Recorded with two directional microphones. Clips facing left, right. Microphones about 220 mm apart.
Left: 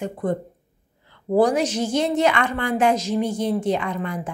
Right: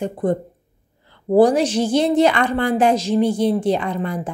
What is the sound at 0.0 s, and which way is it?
A woman's voice, 35° right (ahead or behind).